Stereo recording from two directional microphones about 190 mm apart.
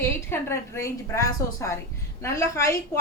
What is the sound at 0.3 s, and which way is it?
A woman's voice, 15° left (ahead or behind).